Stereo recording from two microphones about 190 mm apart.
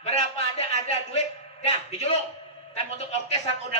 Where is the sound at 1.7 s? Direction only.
35° left (ahead or behind).